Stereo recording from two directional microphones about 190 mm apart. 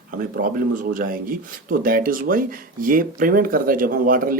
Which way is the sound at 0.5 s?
45° right (ahead or behind).